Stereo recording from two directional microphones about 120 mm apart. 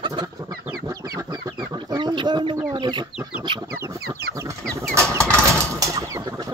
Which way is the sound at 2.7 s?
40° right (ahead or behind).